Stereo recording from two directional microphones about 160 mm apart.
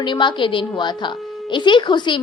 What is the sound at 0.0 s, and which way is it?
A woman's voice, 30° left (ahead or behind).